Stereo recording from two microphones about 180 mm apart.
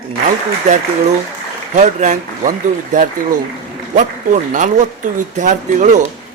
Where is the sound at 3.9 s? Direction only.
45° right (ahead or behind).